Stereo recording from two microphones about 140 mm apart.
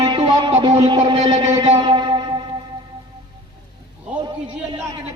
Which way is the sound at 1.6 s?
35° right (ahead or behind).